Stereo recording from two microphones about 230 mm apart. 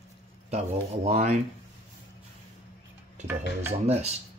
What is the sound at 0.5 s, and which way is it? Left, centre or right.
Speech, right.